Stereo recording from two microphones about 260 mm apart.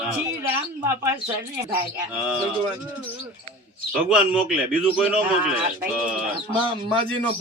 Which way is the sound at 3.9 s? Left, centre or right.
Centre.